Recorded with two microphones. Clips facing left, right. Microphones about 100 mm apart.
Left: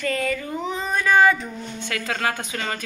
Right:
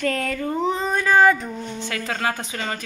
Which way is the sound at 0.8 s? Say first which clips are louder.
Even; 30° right (ahead or behind).